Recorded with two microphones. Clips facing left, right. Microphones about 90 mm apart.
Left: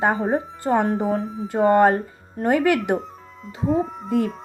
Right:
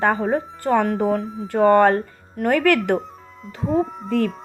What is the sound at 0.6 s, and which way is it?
Speech, 20° left (ahead or behind).